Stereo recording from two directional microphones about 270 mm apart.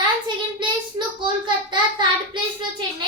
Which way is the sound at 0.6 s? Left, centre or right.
Centre.